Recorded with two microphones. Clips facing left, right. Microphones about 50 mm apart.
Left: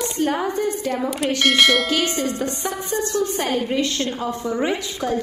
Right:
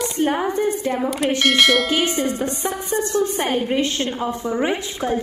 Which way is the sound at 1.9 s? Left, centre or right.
Centre.